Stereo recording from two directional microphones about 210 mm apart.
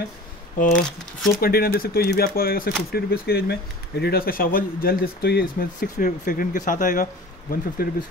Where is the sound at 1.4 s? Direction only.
45° left (ahead or behind).